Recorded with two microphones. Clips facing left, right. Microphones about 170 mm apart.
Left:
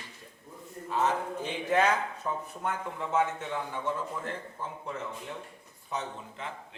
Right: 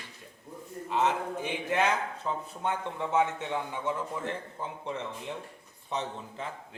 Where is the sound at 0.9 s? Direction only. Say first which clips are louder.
Right 1 dB; 20° right (ahead or behind).